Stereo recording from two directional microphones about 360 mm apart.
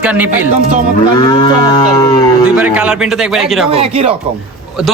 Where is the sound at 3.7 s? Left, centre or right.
Centre.